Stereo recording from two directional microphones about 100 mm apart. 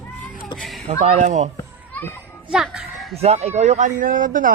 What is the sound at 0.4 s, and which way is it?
Speech, centre (ahead or behind).